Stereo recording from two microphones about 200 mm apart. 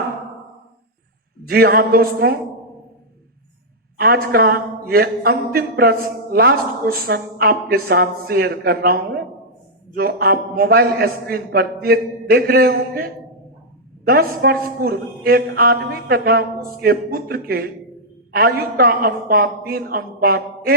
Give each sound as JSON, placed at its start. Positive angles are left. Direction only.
{"t": 1.5, "sound": "a man's voice", "side_deg": -50}
{"t": 3.9, "sound": "a man's voice", "side_deg": -50}